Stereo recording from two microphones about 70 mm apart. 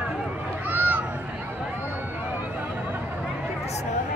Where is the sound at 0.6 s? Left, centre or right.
Right.